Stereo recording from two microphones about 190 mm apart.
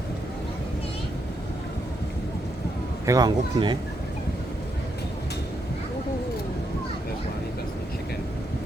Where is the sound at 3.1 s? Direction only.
20° right (ahead or behind).